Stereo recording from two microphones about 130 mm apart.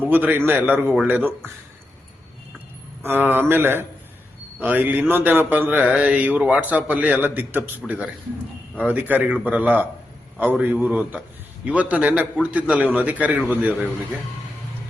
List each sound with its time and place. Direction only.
0.0 s a man's voice: 15° right (ahead or behind)
3.0 s a man's voice: 15° right (ahead or behind)